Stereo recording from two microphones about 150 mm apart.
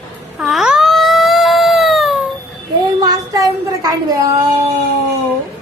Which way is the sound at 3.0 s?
25° right (ahead or behind).